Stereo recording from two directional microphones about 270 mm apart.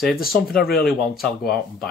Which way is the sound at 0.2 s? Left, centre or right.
Left.